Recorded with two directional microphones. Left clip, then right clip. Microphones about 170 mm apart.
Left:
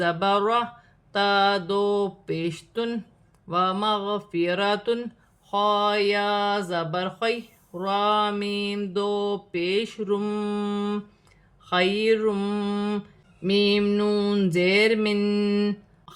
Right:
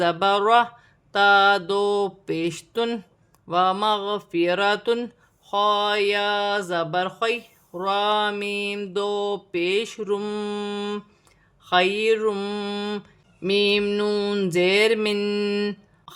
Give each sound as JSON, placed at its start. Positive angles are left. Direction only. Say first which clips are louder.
{"t": 0.0, "sound": "speech", "louder": "right 2 dB", "side_deg": -35}
{"t": 11.6, "sound": "mantra", "louder": "right 3 dB", "side_deg": -25}
{"t": 13.4, "sound": "speech", "louder": "right 2 dB", "side_deg": -30}